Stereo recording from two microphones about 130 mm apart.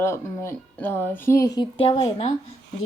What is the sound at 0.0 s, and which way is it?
Speech, 20° left (ahead or behind).